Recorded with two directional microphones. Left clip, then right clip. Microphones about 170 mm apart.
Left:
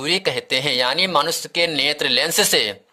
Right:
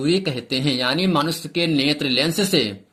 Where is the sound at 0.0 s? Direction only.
50° left (ahead or behind).